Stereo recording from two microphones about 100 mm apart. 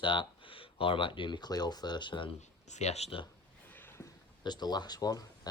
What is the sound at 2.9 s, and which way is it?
Speech, 90° left.